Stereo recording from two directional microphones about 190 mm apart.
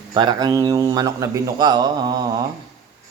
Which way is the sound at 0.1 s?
25° right (ahead or behind).